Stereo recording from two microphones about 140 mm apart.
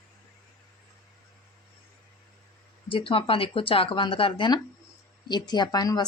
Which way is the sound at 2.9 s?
40° left (ahead or behind).